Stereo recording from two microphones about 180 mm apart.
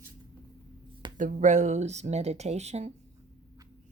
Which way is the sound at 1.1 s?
45° right (ahead or behind).